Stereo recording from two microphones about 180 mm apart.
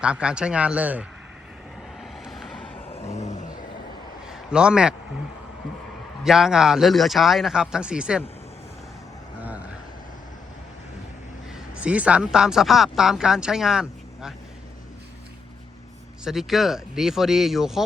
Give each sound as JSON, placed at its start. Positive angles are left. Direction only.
{"t": 0.0, "sound": "speech", "side_deg": -5}
{"t": 2.0, "sound": "vehicle", "side_deg": 0}
{"t": 2.9, "sound": "vehicle", "side_deg": 40}
{"t": 4.3, "sound": "a man's voice", "side_deg": -5}
{"t": 6.2, "sound": "speech", "side_deg": 0}
{"t": 9.4, "sound": "vehicle", "side_deg": -10}
{"t": 11.7, "sound": "speech", "side_deg": -5}
{"t": 16.2, "sound": "speech", "side_deg": 0}